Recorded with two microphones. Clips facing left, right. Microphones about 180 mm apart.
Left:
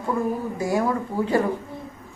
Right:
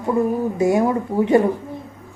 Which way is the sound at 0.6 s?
20° right (ahead or behind).